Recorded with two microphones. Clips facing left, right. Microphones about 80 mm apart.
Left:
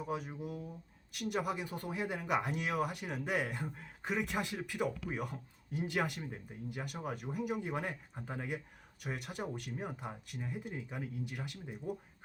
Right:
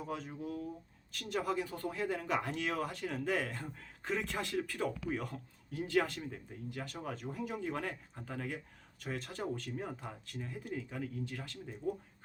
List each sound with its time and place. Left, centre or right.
0.0 s speech: centre